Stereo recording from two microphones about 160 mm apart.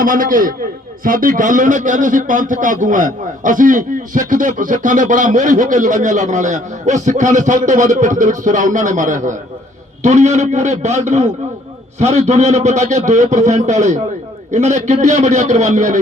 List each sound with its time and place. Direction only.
0.0 s a man's voice: 60° right (ahead or behind)